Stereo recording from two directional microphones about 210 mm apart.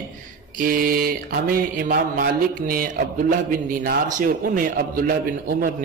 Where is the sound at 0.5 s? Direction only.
45° right (ahead or behind).